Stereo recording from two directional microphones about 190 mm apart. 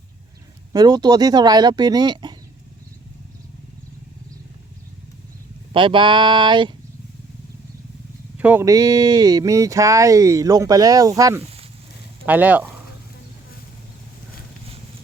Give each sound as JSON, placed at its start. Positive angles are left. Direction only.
{"t": 0.7, "sound": "speech", "side_deg": -20}
{"t": 5.7, "sound": "speech", "side_deg": -25}
{"t": 8.4, "sound": "speech", "side_deg": -10}